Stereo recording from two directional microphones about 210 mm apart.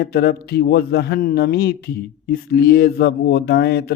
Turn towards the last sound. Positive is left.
turn(degrees=50)  # may be behind; listen again after turning